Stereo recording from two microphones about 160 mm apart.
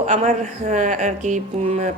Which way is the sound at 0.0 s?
45° right (ahead or behind).